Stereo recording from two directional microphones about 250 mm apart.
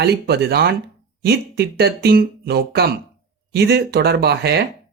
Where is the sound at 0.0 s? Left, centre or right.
Right.